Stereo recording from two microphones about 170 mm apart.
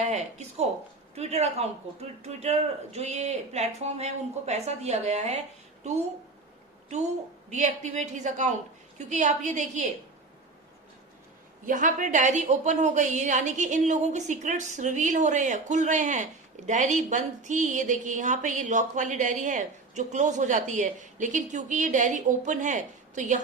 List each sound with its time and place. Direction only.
0.0 s a man's voice: 40° right (ahead or behind)
7.5 s a woman's voice: 45° right (ahead or behind)
11.6 s a woman's voice: 50° right (ahead or behind)